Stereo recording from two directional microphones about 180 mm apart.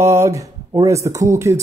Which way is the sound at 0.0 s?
15° right (ahead or behind).